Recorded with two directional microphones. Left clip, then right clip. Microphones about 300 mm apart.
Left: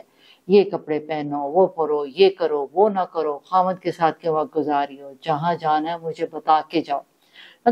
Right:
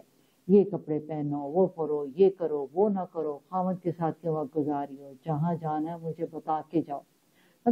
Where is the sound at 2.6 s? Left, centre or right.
Centre.